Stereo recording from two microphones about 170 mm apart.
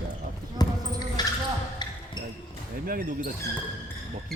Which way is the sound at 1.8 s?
25° left (ahead or behind).